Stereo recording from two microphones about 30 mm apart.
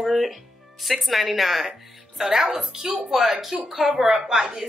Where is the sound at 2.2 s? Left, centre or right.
Centre.